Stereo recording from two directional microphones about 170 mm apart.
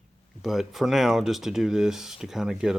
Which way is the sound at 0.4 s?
Centre (ahead or behind).